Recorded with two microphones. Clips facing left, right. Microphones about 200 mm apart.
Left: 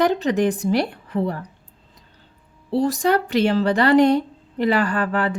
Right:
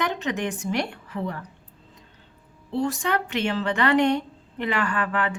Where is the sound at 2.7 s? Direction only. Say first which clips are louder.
Left 6 dB; 35° left (ahead or behind).